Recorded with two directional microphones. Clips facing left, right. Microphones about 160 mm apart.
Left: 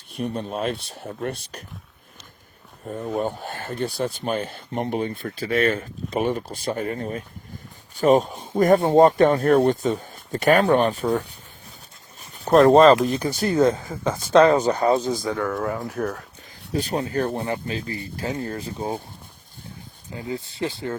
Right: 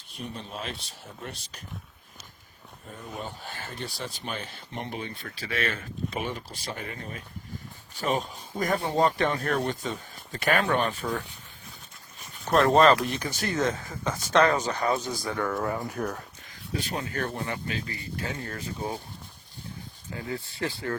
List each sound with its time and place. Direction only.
0.1 s speech: 55° left (ahead or behind)
3.2 s speech: 55° left (ahead or behind); by 11.3 s 40° left (ahead or behind)
12.2 s a sound: 35° left (ahead or behind)
13.1 s speech: 35° left (ahead or behind)
15.2 s speech: centre (ahead or behind)
16.7 s speech: 35° left (ahead or behind)
20.1 s speech: 20° left (ahead or behind)